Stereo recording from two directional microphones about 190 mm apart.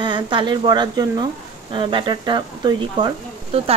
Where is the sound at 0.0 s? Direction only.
25° right (ahead or behind).